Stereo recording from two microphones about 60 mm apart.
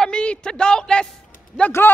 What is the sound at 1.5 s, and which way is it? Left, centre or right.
Speech, centre.